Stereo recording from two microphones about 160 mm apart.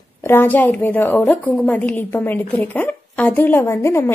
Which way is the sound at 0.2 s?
15° left (ahead or behind).